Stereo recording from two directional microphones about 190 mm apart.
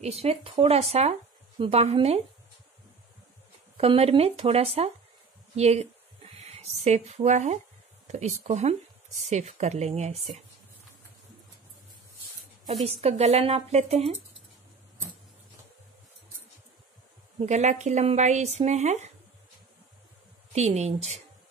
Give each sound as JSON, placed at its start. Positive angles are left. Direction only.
{"t": 0.0, "sound": "speech", "side_deg": -30}
{"t": 3.7, "sound": "speech", "side_deg": -30}
{"t": 5.6, "sound": "a sound", "side_deg": -35}
{"t": 8.1, "sound": "speech", "side_deg": -35}
{"t": 12.8, "sound": "speech", "side_deg": -35}
{"t": 17.4, "sound": "speech", "side_deg": -40}
{"t": 20.5, "sound": "speech", "side_deg": -35}